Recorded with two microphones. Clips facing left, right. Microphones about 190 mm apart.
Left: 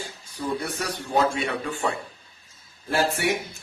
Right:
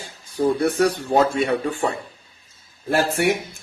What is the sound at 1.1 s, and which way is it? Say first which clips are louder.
Speech: right 3 dB; 40° right (ahead or behind).